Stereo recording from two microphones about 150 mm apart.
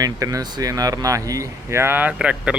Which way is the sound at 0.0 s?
20° right (ahead or behind).